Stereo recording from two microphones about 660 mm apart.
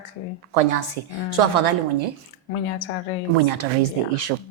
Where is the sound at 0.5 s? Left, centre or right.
Right.